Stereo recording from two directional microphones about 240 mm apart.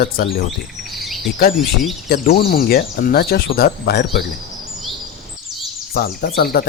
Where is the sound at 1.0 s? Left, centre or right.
Centre.